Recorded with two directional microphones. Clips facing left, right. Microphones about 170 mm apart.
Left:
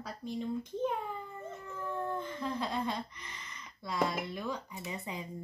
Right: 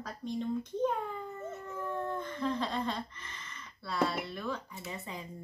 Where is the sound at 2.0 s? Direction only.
10° left (ahead or behind).